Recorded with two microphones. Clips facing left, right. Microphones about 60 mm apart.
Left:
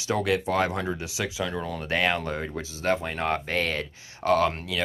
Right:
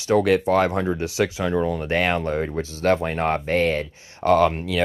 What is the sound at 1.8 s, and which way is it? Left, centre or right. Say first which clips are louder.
Speech: right 4 dB; right.